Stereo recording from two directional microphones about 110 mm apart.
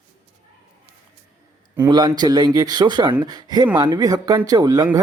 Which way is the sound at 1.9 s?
40° right (ahead or behind).